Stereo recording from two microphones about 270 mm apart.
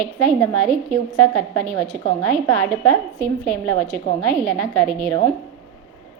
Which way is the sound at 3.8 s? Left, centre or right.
Centre.